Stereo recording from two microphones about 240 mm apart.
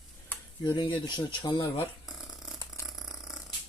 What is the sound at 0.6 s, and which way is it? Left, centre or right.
Speech, centre.